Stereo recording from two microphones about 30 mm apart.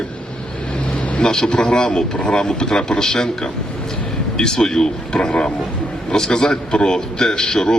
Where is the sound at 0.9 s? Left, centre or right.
Left.